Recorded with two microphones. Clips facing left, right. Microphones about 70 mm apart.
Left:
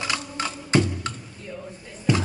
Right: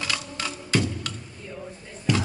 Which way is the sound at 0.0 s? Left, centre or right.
Left.